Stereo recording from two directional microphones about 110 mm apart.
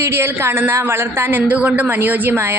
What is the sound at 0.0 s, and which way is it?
A woman's voice, 20° right (ahead or behind).